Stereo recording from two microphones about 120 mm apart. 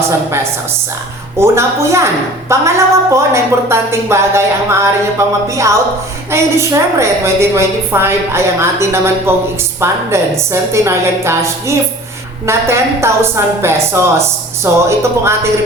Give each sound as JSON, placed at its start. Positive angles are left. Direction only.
{"t": 1.4, "sound": "a woman's voice", "side_deg": -25}